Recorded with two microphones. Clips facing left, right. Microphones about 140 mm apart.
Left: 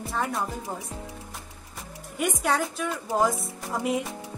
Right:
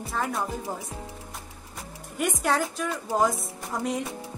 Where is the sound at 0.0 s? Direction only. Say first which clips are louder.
Even; centre (ahead or behind).